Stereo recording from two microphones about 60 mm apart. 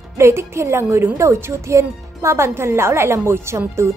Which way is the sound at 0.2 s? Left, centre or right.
Right.